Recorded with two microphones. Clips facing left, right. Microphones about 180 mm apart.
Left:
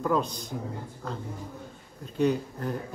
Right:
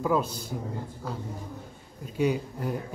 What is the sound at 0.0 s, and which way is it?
Speech, 5° right (ahead or behind).